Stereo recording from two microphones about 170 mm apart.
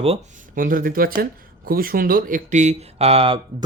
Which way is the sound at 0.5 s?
55° right (ahead or behind).